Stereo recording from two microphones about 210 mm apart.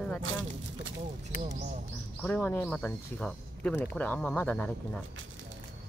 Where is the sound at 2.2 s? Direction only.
5° left (ahead or behind).